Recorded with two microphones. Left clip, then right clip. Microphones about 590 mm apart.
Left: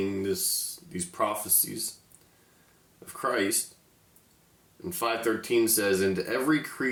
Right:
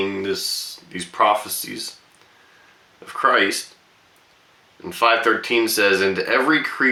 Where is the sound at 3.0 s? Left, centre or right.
Left.